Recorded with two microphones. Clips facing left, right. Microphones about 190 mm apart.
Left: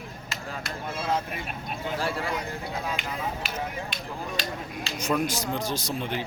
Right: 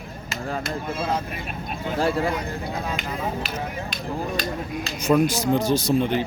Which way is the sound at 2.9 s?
40° right (ahead or behind).